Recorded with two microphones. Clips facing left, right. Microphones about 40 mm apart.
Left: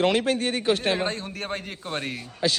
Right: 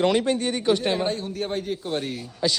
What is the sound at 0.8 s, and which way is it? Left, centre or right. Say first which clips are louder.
A man's voice: right 1 dB; centre.